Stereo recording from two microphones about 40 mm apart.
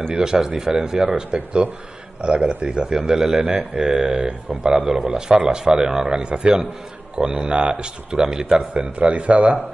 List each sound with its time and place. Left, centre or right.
0.1 s speech: centre
3.3 s speech: right